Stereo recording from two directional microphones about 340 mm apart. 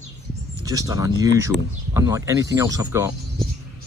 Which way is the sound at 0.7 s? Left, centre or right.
Centre.